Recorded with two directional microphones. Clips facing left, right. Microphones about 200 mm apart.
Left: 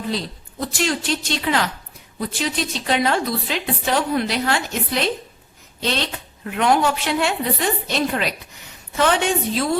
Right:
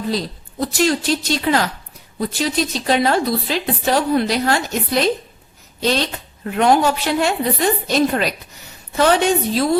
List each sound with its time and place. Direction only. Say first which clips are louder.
0.6 s speech: right 5 dB; 40° right (ahead or behind)